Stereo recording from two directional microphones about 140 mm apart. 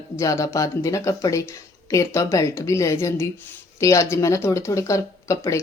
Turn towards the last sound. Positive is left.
turn(degrees=25)  # may be behind; listen again after turning